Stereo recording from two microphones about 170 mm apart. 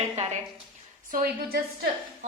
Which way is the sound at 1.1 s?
60° right (ahead or behind).